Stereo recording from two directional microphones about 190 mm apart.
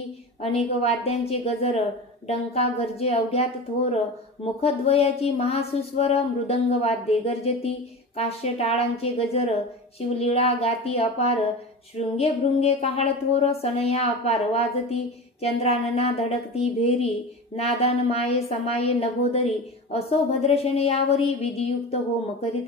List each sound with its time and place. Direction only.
0.4 s a woman's voice: 30° left (ahead or behind)